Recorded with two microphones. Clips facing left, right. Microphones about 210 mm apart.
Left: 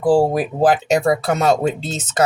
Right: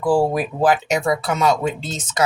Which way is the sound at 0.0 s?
35° left (ahead or behind).